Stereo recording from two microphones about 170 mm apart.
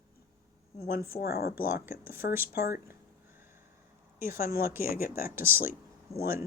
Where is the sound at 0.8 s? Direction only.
60° left (ahead or behind).